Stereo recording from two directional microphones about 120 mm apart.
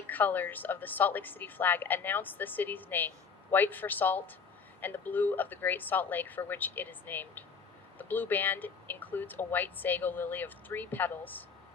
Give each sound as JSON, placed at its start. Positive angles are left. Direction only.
{"t": 0.1, "sound": "speech", "side_deg": 15}